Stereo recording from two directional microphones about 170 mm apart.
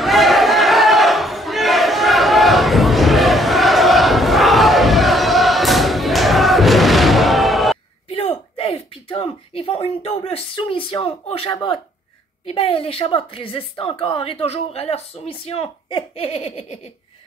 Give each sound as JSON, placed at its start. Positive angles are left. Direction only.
{"t": 0.0, "sound": "battle cry", "side_deg": 0}
{"t": 8.1, "sound": "a sound", "side_deg": 35}
{"t": 11.5, "sound": "a woman's voice", "side_deg": 30}